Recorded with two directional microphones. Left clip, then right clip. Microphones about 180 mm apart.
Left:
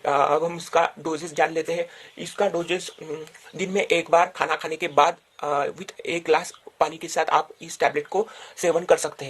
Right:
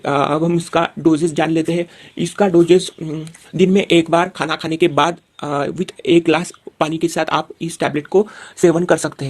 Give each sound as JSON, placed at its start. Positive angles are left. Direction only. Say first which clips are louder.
{"t": 0.0, "sound": "speech", "louder": "right 4 dB", "side_deg": -35}
{"t": 3.6, "sound": "speech", "louder": "right 9 dB", "side_deg": -30}